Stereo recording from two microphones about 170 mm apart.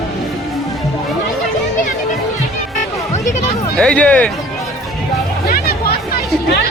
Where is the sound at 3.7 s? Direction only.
5° left (ahead or behind).